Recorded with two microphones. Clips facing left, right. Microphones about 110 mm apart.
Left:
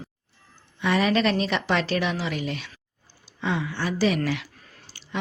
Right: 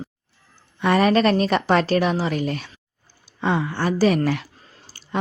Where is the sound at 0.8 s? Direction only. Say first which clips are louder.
Right 5 dB; 50° right (ahead or behind).